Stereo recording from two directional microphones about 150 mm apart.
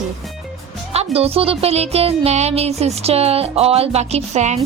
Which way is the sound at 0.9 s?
40° right (ahead or behind).